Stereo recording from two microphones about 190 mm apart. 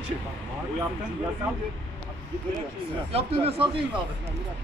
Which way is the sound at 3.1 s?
30° right (ahead or behind).